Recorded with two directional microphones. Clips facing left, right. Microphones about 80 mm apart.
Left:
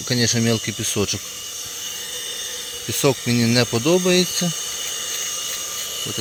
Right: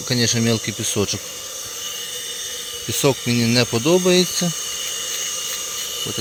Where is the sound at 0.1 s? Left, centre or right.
Centre.